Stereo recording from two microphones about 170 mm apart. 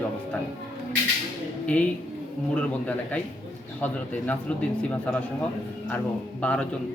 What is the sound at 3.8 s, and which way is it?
A man's voice, 10° left (ahead or behind).